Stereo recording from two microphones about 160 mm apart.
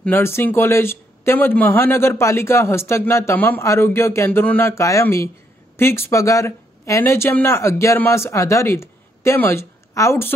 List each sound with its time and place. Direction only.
0.0 s speech: 15° left (ahead or behind)